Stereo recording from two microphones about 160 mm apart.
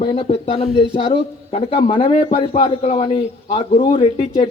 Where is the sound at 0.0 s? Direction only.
35° left (ahead or behind).